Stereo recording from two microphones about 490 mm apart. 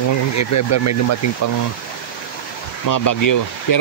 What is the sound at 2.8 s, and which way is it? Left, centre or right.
Speech, left.